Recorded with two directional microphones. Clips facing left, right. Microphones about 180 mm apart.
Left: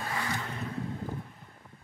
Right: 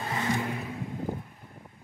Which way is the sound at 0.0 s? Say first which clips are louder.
Right 5 dB; 20° right (ahead or behind).